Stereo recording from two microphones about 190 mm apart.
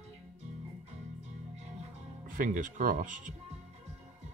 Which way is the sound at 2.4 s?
45° right (ahead or behind).